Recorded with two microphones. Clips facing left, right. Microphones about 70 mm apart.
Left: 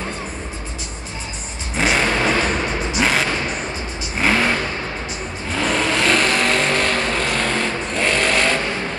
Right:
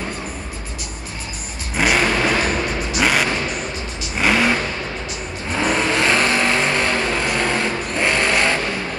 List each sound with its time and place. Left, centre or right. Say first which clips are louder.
1.8 s vehicle: right 1 dB; centre
3.0 s music: right 1 dB; centre
4.2 s vehicle: right 1 dB; centre